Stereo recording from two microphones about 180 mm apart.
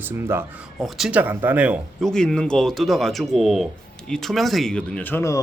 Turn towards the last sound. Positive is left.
turn(degrees=15)  # may be behind; listen again after turning